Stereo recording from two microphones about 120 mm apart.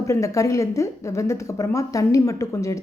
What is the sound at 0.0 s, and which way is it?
Speech, 25° left (ahead or behind).